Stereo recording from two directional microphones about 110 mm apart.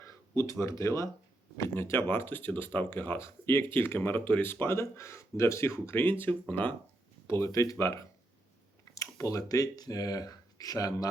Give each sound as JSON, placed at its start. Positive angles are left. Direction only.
{"t": 0.0, "sound": "speech", "side_deg": 30}